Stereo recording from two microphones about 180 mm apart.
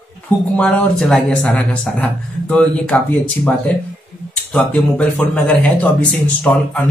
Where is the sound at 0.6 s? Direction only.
5° left (ahead or behind).